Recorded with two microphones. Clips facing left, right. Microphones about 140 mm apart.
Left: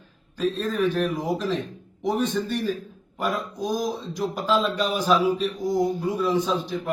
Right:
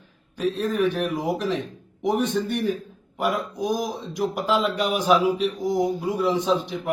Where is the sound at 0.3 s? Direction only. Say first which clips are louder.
Right 1 dB; 15° right (ahead or behind).